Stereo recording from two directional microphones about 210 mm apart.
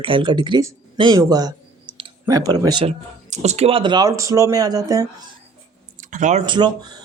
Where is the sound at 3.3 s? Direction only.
35° right (ahead or behind); by 5.0 s 15° right (ahead or behind).